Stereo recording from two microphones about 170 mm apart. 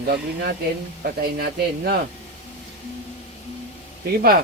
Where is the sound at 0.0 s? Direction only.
65° right (ahead or behind).